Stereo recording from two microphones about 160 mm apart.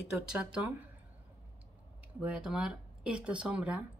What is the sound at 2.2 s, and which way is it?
Speech, 5° right (ahead or behind).